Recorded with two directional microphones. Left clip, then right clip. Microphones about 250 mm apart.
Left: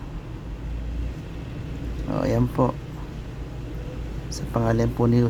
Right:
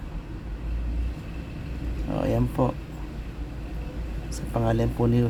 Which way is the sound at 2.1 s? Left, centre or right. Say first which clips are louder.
Left 2 dB; centre.